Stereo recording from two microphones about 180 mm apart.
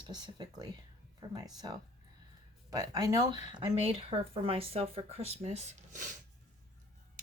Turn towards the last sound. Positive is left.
turn(degrees=-40)  # may be behind; listen again after turning